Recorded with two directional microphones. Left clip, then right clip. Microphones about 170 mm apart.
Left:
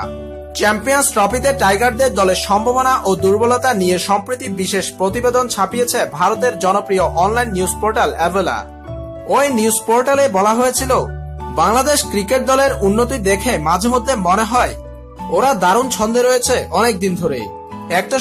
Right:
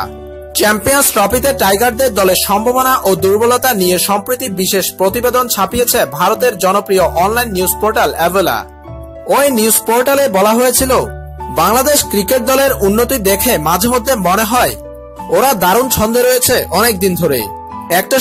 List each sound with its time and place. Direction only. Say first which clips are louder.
0.6 s music: right 3 dB; 30° right (ahead or behind)